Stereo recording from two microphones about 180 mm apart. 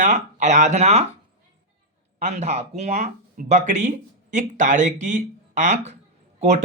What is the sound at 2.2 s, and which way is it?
Speech, 40° right (ahead or behind).